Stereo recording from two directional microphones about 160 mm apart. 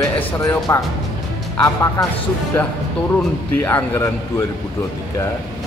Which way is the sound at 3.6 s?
15° left (ahead or behind).